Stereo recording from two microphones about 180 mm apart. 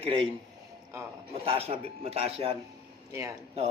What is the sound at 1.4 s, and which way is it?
A man's voice, 30° right (ahead or behind).